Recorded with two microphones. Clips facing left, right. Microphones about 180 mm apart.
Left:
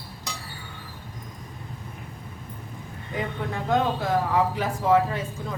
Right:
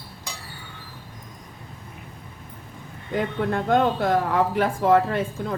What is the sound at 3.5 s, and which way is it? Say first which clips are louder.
Speech: right 3 dB; 60° right (ahead or behind).